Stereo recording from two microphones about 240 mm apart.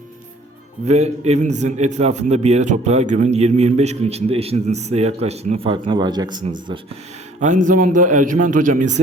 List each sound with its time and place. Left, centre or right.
0.9 s a man's voice: right
7.3 s a man's voice: right